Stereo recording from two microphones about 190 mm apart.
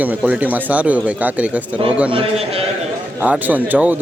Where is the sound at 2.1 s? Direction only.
30° right (ahead or behind).